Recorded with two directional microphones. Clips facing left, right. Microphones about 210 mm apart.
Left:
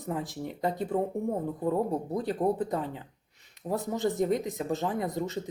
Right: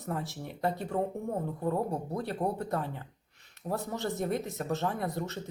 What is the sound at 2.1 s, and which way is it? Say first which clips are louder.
Speech: left 5 dB; 15° left (ahead or behind).